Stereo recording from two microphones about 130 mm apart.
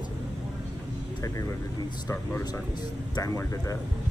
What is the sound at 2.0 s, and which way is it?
Speech, 20° left (ahead or behind).